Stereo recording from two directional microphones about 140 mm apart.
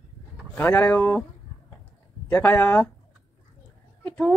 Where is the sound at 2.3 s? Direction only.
15° left (ahead or behind).